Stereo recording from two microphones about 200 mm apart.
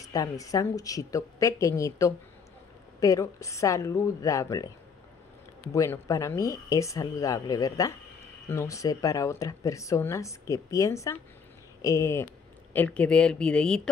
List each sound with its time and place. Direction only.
0.0 s speech: 15° left (ahead or behind)
5.7 s speech: 15° left (ahead or behind)